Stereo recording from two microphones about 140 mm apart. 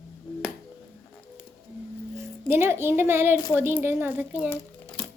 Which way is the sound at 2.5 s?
15° right (ahead or behind).